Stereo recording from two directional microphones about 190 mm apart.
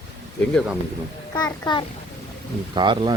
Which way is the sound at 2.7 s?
25° right (ahead or behind).